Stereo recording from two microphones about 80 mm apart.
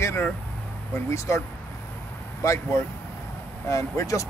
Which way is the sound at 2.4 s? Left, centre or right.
Left.